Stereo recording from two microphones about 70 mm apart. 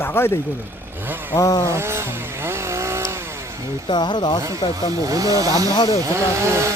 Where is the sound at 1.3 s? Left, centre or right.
Left.